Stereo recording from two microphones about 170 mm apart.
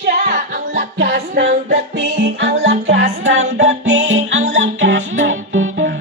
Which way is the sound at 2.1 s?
90° right.